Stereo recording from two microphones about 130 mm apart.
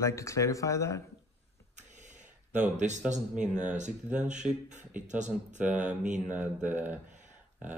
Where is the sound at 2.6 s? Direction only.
65° right (ahead or behind).